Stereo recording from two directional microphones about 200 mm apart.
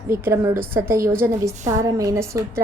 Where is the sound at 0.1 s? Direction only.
15° right (ahead or behind).